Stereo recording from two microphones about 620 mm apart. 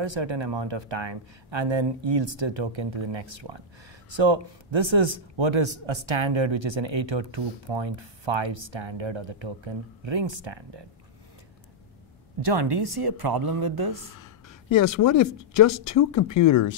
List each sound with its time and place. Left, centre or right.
0.0 s a man's voice: right
12.4 s speech: right
15.0 s speech: left